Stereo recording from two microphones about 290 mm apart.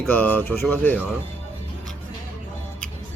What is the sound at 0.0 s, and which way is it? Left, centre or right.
Speech, centre.